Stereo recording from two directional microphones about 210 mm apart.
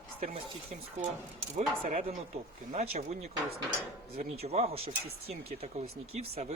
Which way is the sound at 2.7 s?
35° right (ahead or behind).